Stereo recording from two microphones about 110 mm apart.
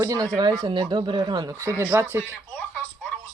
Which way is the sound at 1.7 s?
25° right (ahead or behind).